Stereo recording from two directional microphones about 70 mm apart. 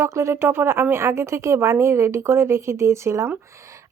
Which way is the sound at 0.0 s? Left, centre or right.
Right.